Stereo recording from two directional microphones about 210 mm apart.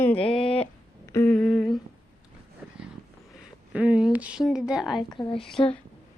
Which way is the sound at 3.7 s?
5° right (ahead or behind).